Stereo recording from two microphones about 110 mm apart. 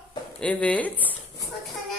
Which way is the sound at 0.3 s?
10° left (ahead or behind).